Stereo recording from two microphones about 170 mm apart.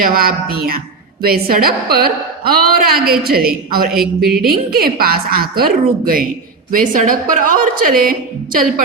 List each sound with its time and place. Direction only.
0.0 s a woman's voice: 60° right (ahead or behind)
3.9 s speech: centre (ahead or behind)
4.4 s a woman's voice: 60° right (ahead or behind)